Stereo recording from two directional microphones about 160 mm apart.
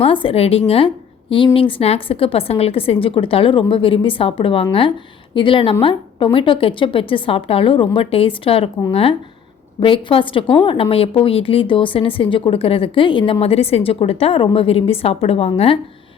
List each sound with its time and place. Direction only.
0.0 s a woman's voice: 35° left (ahead or behind)